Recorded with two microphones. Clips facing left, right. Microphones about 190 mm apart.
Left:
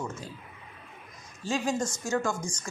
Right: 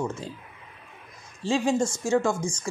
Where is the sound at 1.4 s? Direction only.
30° right (ahead or behind).